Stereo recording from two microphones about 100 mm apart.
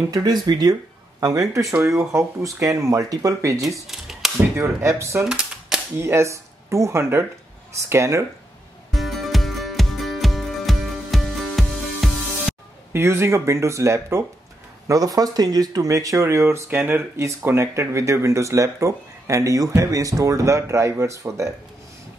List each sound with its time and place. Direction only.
0.1 s speech: 45° right (ahead or behind)
3.8 s a sound: 5° right (ahead or behind)
4.6 s speech: 30° right (ahead or behind)
5.3 s typewriter: 5° right (ahead or behind)
5.9 s speech: 30° right (ahead or behind)
8.9 s music: centre (ahead or behind)
12.9 s speech: 25° right (ahead or behind)